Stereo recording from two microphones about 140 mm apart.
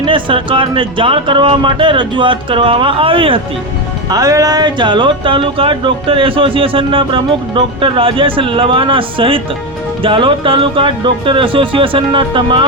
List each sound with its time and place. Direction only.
0.0 s speech: 35° right (ahead or behind)
4.1 s speech: 25° right (ahead or behind)